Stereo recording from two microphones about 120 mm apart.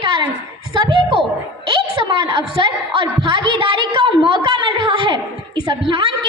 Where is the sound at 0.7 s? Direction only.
40° right (ahead or behind).